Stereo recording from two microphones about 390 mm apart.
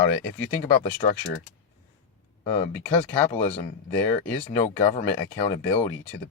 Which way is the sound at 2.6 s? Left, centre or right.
Centre.